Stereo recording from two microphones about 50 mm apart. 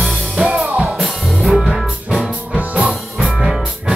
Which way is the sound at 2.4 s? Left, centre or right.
Right.